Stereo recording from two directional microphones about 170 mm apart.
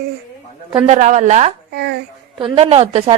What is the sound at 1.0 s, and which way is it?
Child singing, 45° right (ahead or behind).